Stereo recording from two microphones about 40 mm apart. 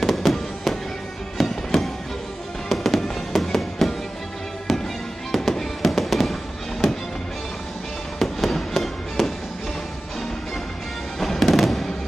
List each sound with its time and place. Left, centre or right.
0.0 s fireworks: centre
4.7 s music: centre
5.3 s fireworks: centre
8.2 s fireworks: centre
11.1 s music: centre